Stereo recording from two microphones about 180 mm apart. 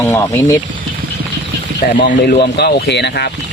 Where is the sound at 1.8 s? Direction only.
55° left (ahead or behind).